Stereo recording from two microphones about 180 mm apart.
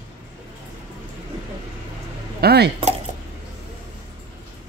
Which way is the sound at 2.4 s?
65° right (ahead or behind).